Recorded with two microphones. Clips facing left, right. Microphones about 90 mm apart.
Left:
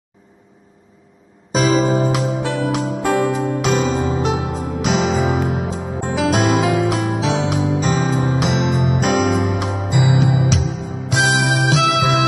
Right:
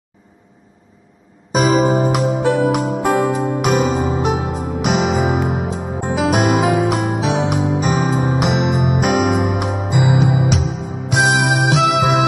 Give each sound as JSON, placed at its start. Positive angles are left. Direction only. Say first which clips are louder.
{"t": 1.6, "sound": "music", "louder": "right 2 dB", "side_deg": -15}
{"t": 10.4, "sound": "music", "louder": "right 1 dB", "side_deg": -55}
{"t": 11.1, "sound": "music", "louder": "right 2 dB", "side_deg": -15}